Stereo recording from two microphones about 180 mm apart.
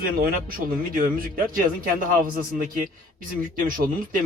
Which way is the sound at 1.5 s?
50° right (ahead or behind).